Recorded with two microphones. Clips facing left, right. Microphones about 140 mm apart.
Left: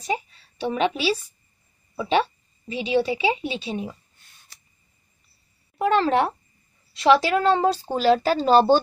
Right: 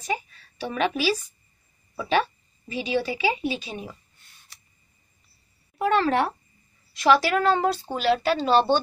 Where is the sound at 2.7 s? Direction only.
25° left (ahead or behind).